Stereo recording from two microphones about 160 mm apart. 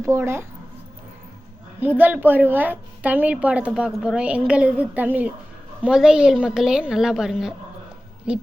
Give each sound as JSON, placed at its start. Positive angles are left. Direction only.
{"t": 0.0, "sound": "a woman's voice", "side_deg": -15}
{"t": 1.8, "sound": "a woman's voice", "side_deg": -10}